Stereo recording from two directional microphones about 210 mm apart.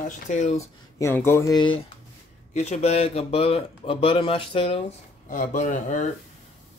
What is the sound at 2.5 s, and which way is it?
Speech, 30° left (ahead or behind).